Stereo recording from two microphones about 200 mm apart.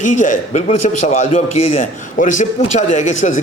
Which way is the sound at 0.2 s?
35° left (ahead or behind).